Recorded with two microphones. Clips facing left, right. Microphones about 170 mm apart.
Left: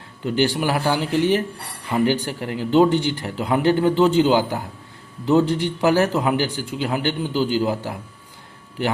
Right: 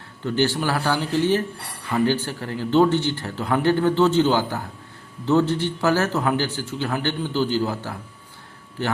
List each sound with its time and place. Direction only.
0.3 s a man's voice: 15° left (ahead or behind)